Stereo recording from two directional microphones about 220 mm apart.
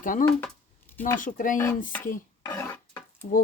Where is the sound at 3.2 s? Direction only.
30° left (ahead or behind).